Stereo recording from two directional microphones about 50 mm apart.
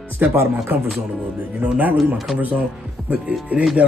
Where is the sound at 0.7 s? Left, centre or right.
Right.